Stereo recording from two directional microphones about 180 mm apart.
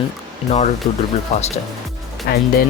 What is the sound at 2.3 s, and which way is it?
Speech, 55° left (ahead or behind).